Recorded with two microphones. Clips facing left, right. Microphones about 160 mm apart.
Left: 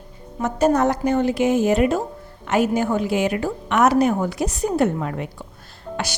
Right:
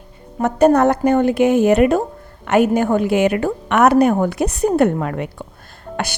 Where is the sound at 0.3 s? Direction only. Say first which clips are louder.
Right 5 dB; 60° right (ahead or behind).